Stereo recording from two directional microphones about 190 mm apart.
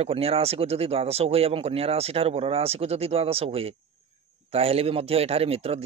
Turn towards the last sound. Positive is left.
turn(degrees=-30)  # may be behind; listen again after turning